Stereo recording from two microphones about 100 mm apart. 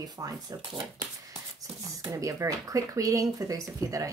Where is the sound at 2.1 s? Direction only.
35° right (ahead or behind).